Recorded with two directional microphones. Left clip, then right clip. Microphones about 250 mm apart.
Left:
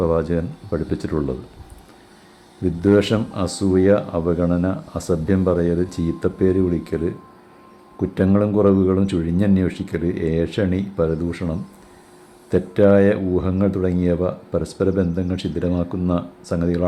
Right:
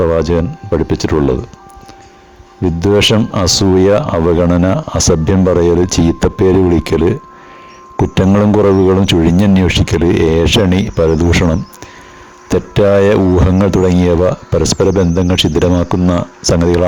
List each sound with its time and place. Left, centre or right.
0.0 s speech: right
2.8 s speech: right